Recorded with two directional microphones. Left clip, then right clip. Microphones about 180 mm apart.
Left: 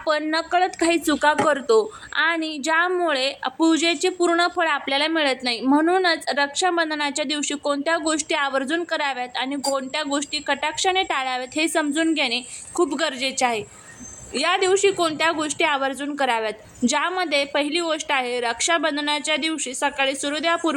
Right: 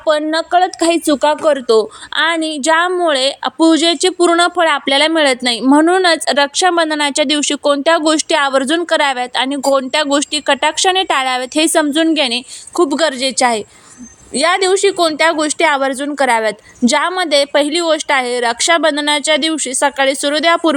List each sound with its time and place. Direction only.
0.0 s speech: 25° right (ahead or behind); by 20.7 s 45° right (ahead or behind)